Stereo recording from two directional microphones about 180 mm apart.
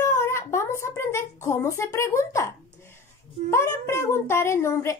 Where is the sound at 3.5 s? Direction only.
15° left (ahead or behind).